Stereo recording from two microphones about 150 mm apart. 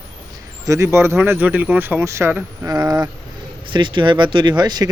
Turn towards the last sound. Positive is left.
turn(degrees=-30)  # may be behind; listen again after turning